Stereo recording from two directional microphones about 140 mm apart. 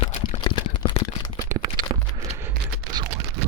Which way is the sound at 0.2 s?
30° left (ahead or behind).